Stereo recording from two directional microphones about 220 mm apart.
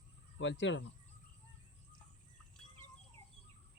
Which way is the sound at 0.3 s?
55° left (ahead or behind).